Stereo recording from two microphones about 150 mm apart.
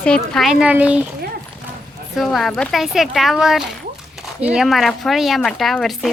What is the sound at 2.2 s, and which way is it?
Speech, centre (ahead or behind).